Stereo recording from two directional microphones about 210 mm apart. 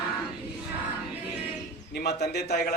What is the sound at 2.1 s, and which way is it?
Speech, 50° left (ahead or behind).